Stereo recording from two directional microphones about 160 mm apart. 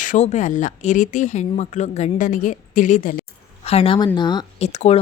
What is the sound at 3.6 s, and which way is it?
Speech, 40° left (ahead or behind).